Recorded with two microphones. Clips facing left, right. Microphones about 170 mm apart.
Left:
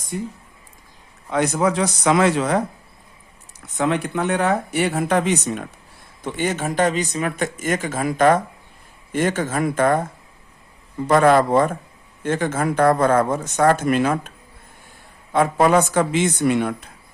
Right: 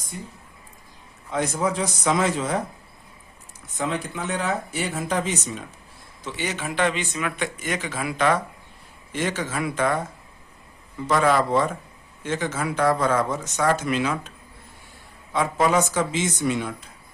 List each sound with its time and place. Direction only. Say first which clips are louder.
1.3 s speech: left 5 dB; 75° left (ahead or behind)
3.8 s speech: left 7 dB; 65° left (ahead or behind)
6.2 s speech: left 6 dB; 50° left (ahead or behind)